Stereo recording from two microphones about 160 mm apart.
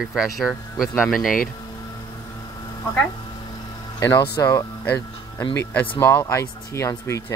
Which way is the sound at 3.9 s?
25° left (ahead or behind).